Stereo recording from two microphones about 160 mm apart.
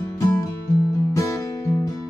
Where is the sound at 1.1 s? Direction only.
20° left (ahead or behind).